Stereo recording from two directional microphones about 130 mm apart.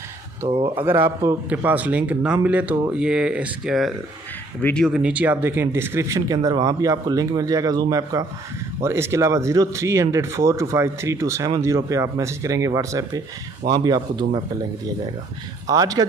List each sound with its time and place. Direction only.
0.5 s speech: 45° right (ahead or behind)
0.7 s a man's voice: 15° right (ahead or behind)
4.6 s speech: 10° left (ahead or behind)
4.9 s speech: 10° right (ahead or behind); by 14.4 s 30° right (ahead or behind)
15.6 s speech: 30° right (ahead or behind)